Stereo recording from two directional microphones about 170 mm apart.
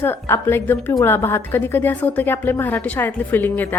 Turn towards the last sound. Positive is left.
turn(degrees=10)  # may be behind; listen again after turning